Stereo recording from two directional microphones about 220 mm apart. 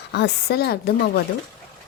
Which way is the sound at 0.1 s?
50° left (ahead or behind).